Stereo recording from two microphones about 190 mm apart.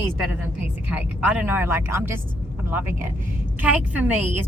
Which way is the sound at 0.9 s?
10° right (ahead or behind).